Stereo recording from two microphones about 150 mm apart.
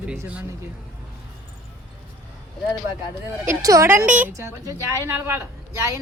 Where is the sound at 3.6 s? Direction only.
20° right (ahead or behind).